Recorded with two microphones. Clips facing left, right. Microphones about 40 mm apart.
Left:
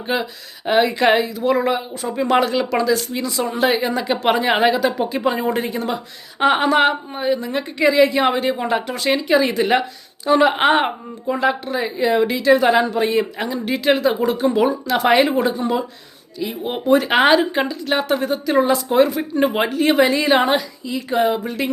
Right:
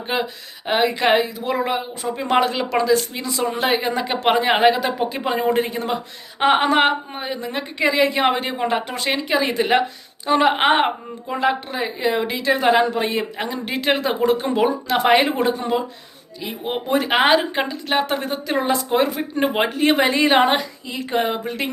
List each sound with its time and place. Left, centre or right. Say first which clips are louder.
0.1 s a woman's voice: left 1 dB; centre